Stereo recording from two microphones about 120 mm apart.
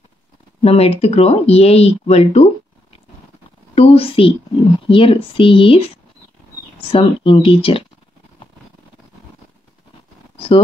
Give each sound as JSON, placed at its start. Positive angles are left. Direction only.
{"t": 0.6, "sound": "speech", "side_deg": 55}
{"t": 3.7, "sound": "speech", "side_deg": 55}
{"t": 10.3, "sound": "a sound", "side_deg": 55}